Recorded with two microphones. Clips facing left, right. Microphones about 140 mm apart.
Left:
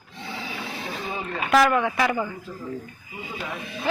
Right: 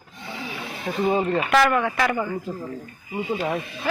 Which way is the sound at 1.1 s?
45° right (ahead or behind).